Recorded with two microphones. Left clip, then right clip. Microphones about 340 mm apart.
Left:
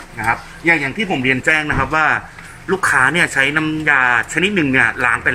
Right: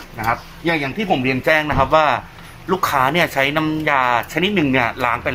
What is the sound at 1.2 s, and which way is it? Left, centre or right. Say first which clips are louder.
A man's voice: left 3 dB; centre.